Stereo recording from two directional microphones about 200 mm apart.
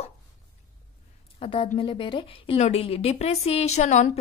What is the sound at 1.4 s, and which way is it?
A woman's voice, 25° left (ahead or behind).